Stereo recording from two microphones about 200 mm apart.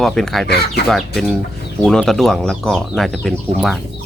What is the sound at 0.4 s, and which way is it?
Speech, 55° left (ahead or behind).